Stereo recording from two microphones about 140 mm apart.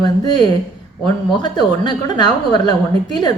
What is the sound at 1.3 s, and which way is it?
A woman's voice, 30° left (ahead or behind).